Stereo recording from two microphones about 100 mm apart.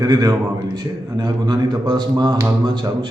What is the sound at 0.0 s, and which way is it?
A man's voice, 40° right (ahead or behind).